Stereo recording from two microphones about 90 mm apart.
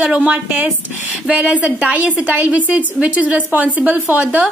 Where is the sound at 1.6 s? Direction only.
20° right (ahead or behind).